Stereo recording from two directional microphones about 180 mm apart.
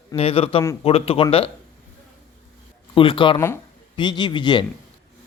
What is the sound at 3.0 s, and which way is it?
A man's voice, 30° left (ahead or behind).